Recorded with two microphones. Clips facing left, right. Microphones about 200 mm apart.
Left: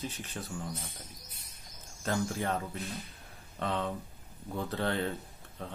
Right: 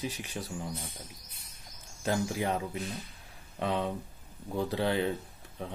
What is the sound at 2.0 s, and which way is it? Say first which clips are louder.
Speech: right 2 dB; 15° right (ahead or behind).